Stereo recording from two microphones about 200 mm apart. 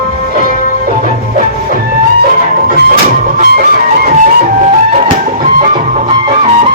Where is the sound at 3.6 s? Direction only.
45° right (ahead or behind).